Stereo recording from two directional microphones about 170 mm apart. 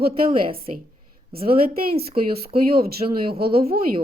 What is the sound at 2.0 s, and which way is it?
Speech, 35° right (ahead or behind).